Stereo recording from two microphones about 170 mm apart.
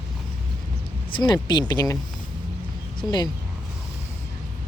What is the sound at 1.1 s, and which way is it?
Speech, 25° left (ahead or behind).